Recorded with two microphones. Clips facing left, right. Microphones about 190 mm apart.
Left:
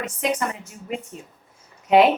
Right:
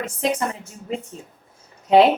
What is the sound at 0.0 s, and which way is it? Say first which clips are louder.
Speech: right 1 dB; 30° right (ahead or behind).